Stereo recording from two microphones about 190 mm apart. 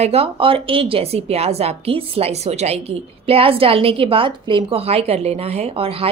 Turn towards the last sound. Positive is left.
turn(degrees=-30)  # may be behind; listen again after turning